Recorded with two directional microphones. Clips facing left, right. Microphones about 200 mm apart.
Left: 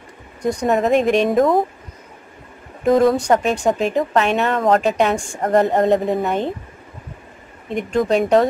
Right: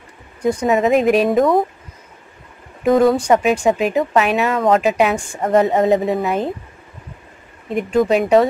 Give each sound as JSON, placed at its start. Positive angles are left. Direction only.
{"t": 0.4, "sound": "speech", "side_deg": -5}
{"t": 2.8, "sound": "speech", "side_deg": 0}
{"t": 7.7, "sound": "speech", "side_deg": -5}